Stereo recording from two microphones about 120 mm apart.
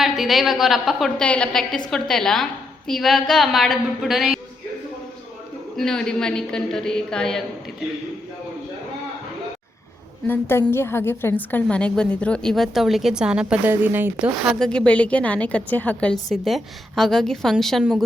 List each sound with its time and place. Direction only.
0.0 s a woman's voice: centre (ahead or behind)
5.7 s a woman's voice: 5° left (ahead or behind)
10.2 s a woman's voice: 15° left (ahead or behind); by 14.3 s 15° right (ahead or behind)
14.5 s a woman's voice: 5° left (ahead or behind)